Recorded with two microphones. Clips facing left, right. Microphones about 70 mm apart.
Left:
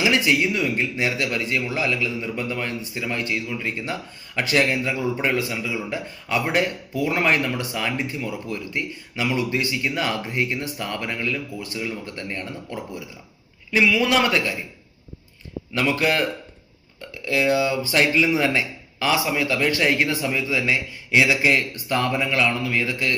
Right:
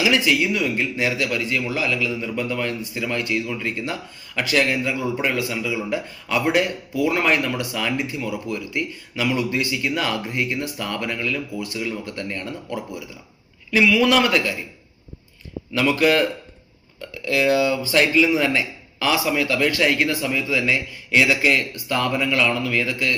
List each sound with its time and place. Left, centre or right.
0.0 s speech: left
15.7 s speech: left
17.2 s speech: left